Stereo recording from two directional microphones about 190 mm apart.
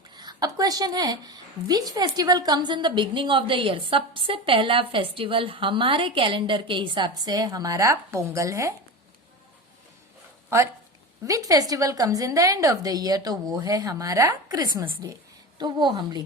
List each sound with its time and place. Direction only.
0.1 s a woman's voice: 20° right (ahead or behind)
10.5 s a woman's voice: 15° right (ahead or behind)